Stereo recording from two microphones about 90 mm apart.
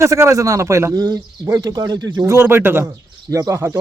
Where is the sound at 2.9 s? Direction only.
45° right (ahead or behind).